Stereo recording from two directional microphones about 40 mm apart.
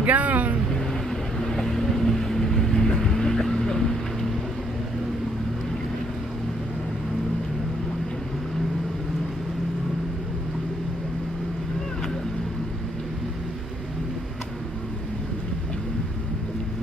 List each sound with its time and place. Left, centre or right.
0.0 s vehicle: right
1.4 s vehicle: centre